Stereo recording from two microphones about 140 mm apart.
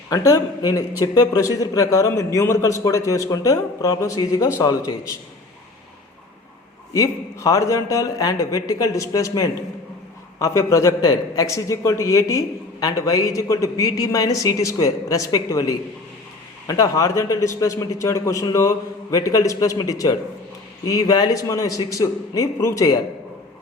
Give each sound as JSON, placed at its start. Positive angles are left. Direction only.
{"t": 0.1, "sound": "a man's voice", "side_deg": 25}
{"t": 6.9, "sound": "a man's voice", "side_deg": 25}